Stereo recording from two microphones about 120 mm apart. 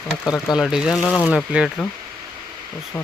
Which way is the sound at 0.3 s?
Centre (ahead or behind).